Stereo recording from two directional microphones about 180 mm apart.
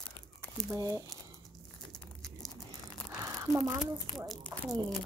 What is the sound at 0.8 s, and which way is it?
Speech, 20° right (ahead or behind).